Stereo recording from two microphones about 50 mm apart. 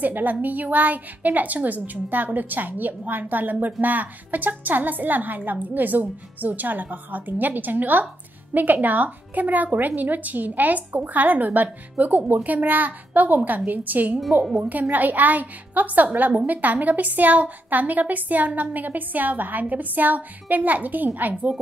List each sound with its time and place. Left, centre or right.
0.0 s a woman's voice: right